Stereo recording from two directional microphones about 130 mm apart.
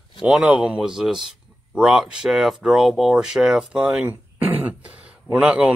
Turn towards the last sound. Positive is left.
turn(degrees=-10)  # may be behind; listen again after turning